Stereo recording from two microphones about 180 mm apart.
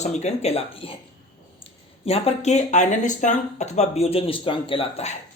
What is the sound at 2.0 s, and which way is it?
Speech, 35° left (ahead or behind).